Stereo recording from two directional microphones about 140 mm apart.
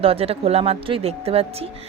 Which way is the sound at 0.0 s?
45° right (ahead or behind).